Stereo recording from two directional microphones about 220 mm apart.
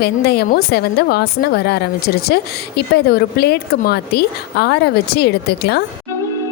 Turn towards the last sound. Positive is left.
turn(degrees=50)  # may be behind; listen again after turning